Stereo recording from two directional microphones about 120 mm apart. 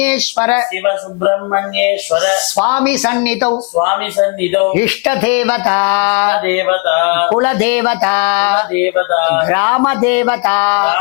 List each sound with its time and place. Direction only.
0.0 s speech: 15° left (ahead or behind)
3.5 s speech: 30° left (ahead or behind)